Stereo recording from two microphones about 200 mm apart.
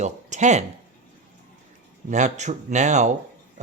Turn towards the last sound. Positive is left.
turn(degrees=-35)  # may be behind; listen again after turning